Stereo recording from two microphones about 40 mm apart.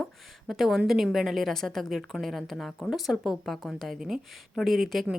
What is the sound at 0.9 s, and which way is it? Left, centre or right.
A woman's voice, centre.